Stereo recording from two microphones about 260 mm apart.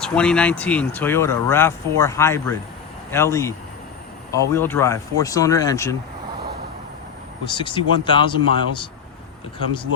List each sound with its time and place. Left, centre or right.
0.0 s speech: centre
7.5 s speech: centre
9.6 s speech: centre